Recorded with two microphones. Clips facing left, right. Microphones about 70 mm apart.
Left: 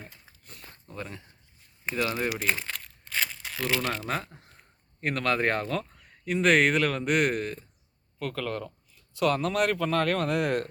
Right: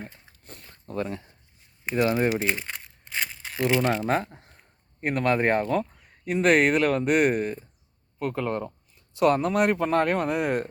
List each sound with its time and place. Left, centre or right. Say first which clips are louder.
0.0 s a sound: right 6 dB; right
0.9 s speech: right 9 dB; right
2.2 s speech: right 6 dB; right
2.5 s crumpling: right 1 dB; centre
3.4 s speech: right 9 dB; right
4.0 s speech: right 7 dB; right; by 10.7 s centre